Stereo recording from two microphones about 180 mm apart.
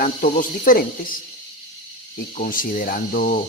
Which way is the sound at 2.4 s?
50° left (ahead or behind).